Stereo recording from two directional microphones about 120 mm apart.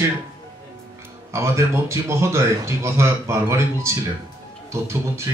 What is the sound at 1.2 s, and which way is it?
Speech, 25° right (ahead or behind).